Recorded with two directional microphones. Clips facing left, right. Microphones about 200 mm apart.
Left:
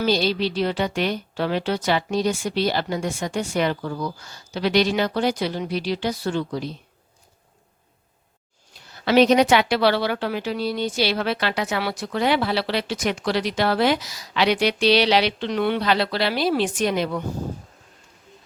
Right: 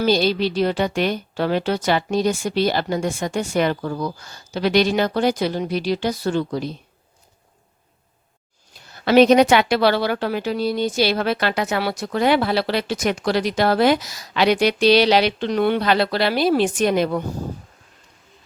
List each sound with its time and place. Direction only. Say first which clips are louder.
0.0 s a woman's voice: right 3 dB; 50° right (ahead or behind)
9.0 s a woman's voice: right 3 dB; 50° right (ahead or behind)